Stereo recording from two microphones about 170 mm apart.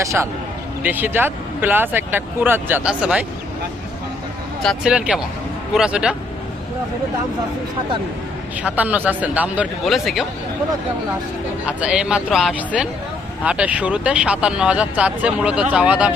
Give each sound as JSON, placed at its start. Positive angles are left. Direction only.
{"t": 0.0, "sound": "speech", "side_deg": -15}
{"t": 4.6, "sound": "speech", "side_deg": 0}
{"t": 8.6, "sound": "speech", "side_deg": -10}
{"t": 11.6, "sound": "speech", "side_deg": -5}